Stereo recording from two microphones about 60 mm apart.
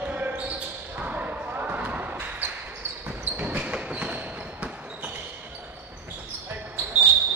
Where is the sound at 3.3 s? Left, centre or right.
Right.